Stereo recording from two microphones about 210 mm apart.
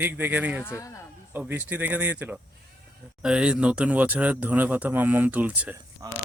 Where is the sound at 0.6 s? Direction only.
15° left (ahead or behind).